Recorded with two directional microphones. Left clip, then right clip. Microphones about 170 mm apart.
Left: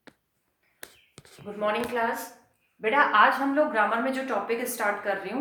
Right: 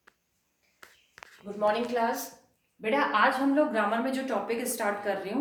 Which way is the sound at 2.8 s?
Centre (ahead or behind).